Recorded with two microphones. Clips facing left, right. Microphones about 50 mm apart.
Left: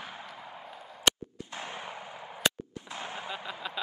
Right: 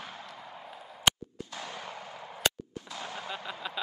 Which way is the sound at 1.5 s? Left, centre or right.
Left.